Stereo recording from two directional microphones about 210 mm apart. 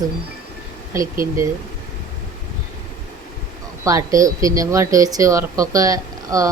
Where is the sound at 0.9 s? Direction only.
15° right (ahead or behind).